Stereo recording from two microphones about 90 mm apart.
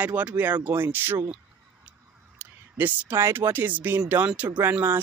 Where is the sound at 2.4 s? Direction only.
20° right (ahead or behind).